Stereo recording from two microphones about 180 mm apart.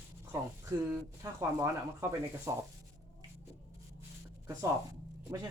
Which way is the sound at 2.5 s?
15° right (ahead or behind).